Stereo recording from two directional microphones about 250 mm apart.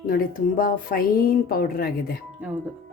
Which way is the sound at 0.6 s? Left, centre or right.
Left.